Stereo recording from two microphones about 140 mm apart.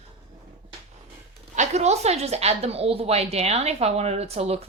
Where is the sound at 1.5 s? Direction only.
50° right (ahead or behind).